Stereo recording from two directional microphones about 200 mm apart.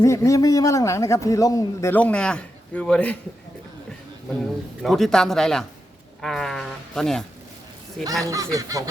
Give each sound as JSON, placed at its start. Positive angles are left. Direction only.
{"t": 0.0, "sound": "a man's voice", "side_deg": 15}
{"t": 4.8, "sound": "speech", "side_deg": 0}
{"t": 8.2, "sound": "speech", "side_deg": -15}